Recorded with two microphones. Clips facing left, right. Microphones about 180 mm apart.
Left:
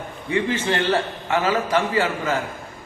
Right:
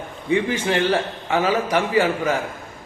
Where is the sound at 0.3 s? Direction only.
15° right (ahead or behind).